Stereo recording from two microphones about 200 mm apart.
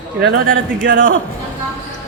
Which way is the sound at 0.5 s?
70° right (ahead or behind).